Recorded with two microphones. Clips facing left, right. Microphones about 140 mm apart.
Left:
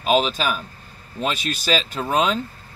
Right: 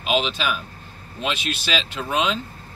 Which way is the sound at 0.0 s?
40° left (ahead or behind).